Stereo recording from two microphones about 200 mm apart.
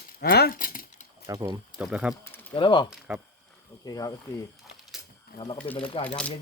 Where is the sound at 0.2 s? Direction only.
55° left (ahead or behind).